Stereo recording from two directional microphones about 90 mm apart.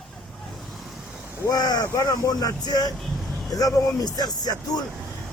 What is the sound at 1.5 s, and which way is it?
Speech, 45° left (ahead or behind).